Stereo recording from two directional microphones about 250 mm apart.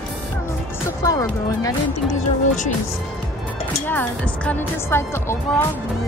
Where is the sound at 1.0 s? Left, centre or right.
Centre.